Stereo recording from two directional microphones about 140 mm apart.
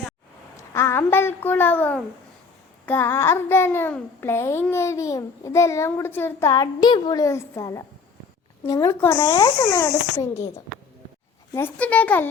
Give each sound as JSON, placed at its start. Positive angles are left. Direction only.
{"t": 0.5, "sound": "a child's voice", "side_deg": 20}
{"t": 11.5, "sound": "a child's voice", "side_deg": 15}